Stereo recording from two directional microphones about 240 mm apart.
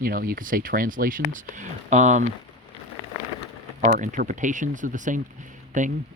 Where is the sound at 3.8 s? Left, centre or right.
Right.